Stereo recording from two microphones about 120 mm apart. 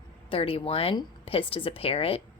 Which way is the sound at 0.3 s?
50° left (ahead or behind).